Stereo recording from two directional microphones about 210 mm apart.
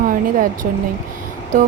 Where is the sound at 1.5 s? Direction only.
40° right (ahead or behind).